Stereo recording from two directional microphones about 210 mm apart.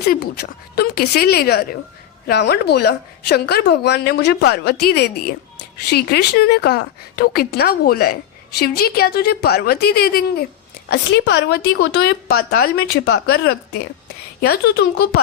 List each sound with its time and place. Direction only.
0.0 s speech: 50° left (ahead or behind)